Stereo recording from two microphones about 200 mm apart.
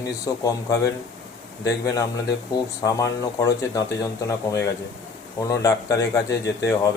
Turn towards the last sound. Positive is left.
turn(degrees=60)  # may be behind; listen again after turning